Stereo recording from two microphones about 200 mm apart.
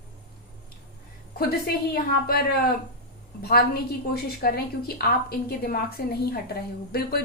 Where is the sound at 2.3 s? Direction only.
45° left (ahead or behind).